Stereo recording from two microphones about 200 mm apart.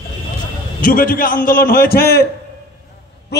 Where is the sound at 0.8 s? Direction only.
45° left (ahead or behind).